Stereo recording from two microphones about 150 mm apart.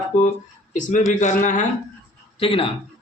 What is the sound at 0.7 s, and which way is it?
Speech, 55° left (ahead or behind).